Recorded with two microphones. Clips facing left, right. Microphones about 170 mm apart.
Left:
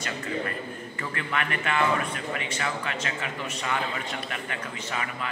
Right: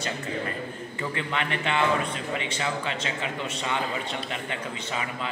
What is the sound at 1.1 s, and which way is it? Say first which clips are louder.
A man's voice: even; 25° right (ahead or behind).